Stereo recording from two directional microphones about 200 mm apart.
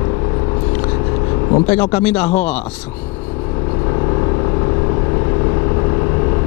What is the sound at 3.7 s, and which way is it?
Vehicle, 25° left (ahead or behind).